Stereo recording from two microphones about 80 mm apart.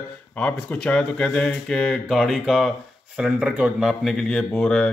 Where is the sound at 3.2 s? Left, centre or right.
Centre.